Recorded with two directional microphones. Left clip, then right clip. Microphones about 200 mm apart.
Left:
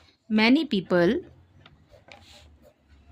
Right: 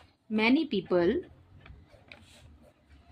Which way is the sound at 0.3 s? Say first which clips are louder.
Left 5 dB; 50° left (ahead or behind).